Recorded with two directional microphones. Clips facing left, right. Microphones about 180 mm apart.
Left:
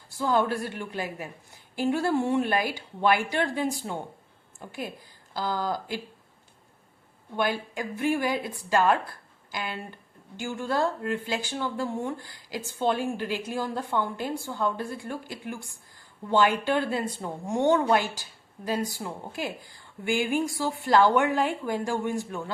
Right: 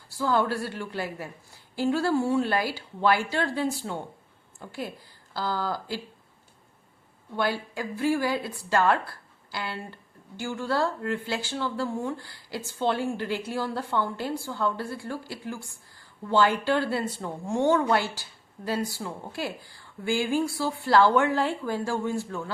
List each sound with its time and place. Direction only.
0.2 s speech: 20° left (ahead or behind)
7.3 s speech: 20° left (ahead or behind)